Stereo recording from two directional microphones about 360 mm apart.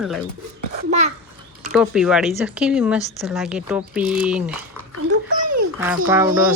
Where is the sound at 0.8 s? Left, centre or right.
Centre.